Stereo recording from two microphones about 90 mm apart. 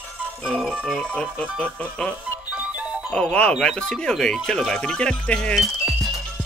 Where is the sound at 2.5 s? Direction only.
15° right (ahead or behind).